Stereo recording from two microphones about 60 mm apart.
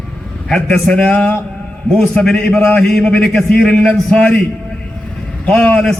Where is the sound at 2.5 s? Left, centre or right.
Left.